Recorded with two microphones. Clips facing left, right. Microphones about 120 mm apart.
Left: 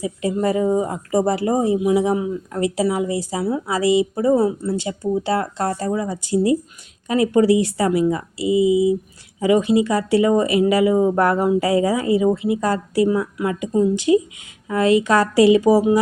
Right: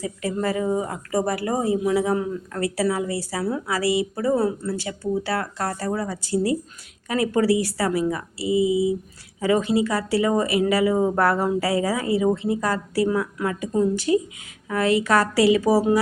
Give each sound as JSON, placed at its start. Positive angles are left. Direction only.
{"t": 0.0, "sound": "speech", "side_deg": 15}